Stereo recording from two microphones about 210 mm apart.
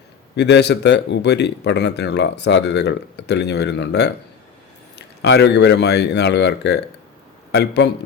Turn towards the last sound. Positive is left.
turn(degrees=55)  # may be behind; listen again after turning